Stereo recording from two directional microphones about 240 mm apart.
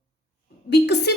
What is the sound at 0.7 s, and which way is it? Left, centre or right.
Speech, left.